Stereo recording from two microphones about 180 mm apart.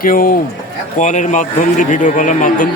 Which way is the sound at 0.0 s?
50° left (ahead or behind).